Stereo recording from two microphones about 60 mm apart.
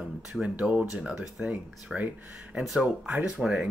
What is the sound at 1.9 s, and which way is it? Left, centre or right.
Speech, right.